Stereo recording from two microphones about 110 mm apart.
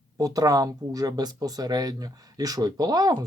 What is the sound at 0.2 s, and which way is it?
Speech, 35° right (ahead or behind).